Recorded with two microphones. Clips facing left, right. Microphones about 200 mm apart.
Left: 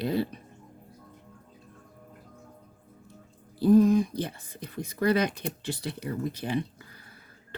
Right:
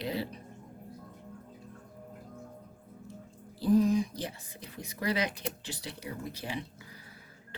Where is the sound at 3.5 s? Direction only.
55° left (ahead or behind).